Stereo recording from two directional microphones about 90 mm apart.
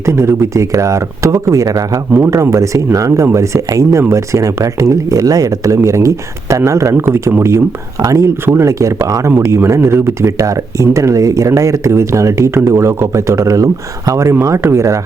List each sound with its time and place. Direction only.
0.0 s speech: 30° right (ahead or behind)